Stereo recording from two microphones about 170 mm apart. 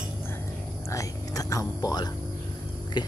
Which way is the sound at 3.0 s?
25° left (ahead or behind).